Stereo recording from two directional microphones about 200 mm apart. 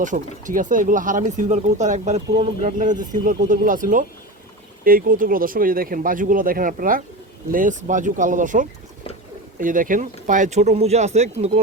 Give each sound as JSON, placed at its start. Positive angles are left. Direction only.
{"t": 0.0, "sound": "speech", "side_deg": -40}